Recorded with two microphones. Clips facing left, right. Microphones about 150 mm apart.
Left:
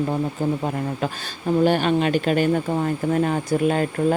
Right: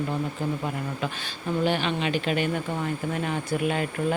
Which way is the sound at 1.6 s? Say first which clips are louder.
Left 7 dB; 45° left (ahead or behind).